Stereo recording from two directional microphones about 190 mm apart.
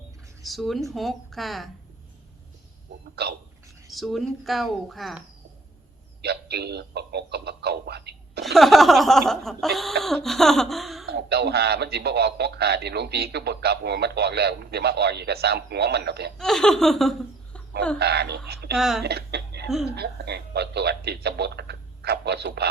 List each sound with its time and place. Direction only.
0.4 s a sound: centre (ahead or behind)
3.2 s a man's voice: 60° right (ahead or behind)
3.9 s a sound: centre (ahead or behind)
6.2 s speech: 60° right (ahead or behind)
8.5 s a sound: centre (ahead or behind)
11.0 s a man's voice: 60° right (ahead or behind)
16.4 s laughter: 5° left (ahead or behind)
18.0 s a man's voice: 60° right (ahead or behind)
18.8 s a sound: centre (ahead or behind)
19.0 s speech: 60° right (ahead or behind)
19.6 s speech: centre (ahead or behind)
20.0 s a man's voice: 60° right (ahead or behind)